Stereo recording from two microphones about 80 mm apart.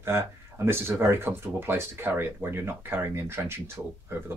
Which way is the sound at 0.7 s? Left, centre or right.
Right.